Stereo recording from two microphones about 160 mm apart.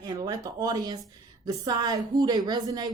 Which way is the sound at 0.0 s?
25° right (ahead or behind).